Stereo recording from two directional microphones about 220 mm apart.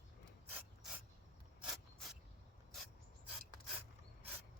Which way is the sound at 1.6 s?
Centre (ahead or behind).